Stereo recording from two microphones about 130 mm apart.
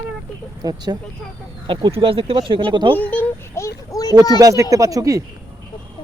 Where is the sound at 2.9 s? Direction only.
15° left (ahead or behind).